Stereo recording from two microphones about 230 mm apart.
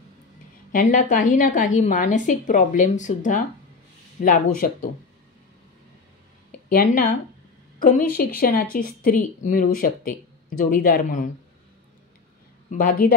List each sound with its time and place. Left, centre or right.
0.7 s a woman's voice: left
6.7 s a woman's voice: left
12.7 s a woman's voice: left